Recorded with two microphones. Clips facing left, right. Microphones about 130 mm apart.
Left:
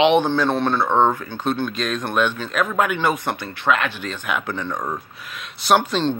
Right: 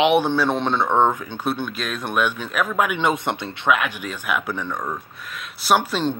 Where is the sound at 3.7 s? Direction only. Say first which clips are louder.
Even; 10° right (ahead or behind).